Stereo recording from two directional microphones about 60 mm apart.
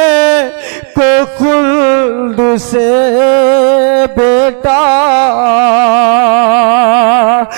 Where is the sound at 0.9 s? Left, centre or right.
Right.